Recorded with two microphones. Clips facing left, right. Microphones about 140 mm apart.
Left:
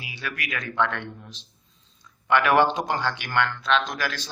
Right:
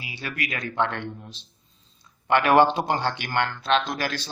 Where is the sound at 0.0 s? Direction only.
30° right (ahead or behind).